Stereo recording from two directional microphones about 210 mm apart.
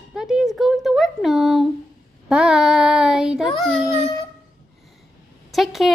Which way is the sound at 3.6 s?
5° left (ahead or behind).